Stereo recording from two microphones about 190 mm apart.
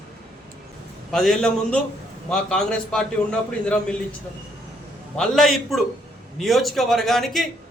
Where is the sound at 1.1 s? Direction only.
Centre (ahead or behind).